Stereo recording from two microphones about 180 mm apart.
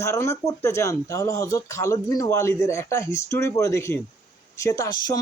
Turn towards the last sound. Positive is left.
turn(degrees=20)  # may be behind; listen again after turning